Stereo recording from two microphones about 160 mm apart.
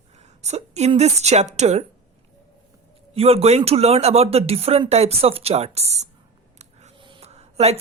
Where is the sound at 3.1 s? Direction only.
40° right (ahead or behind).